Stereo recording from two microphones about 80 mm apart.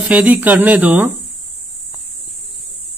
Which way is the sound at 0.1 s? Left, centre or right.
Centre.